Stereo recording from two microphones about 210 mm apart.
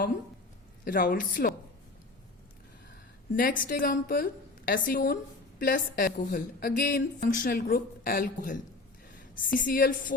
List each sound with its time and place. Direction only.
0.9 s a woman's voice: 40° left (ahead or behind)
3.3 s a woman's voice: 40° left (ahead or behind)